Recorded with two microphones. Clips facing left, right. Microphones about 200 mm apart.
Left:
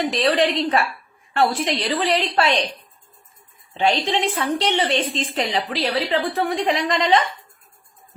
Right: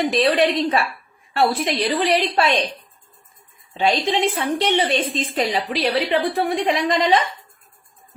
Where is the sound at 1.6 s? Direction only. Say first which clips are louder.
Right 2 dB; 15° right (ahead or behind).